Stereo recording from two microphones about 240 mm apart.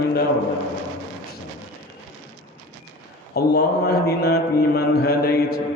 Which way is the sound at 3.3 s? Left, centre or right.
Left.